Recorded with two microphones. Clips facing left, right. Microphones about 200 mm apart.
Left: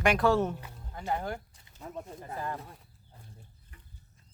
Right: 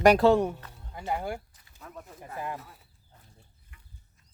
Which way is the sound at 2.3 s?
15° right (ahead or behind).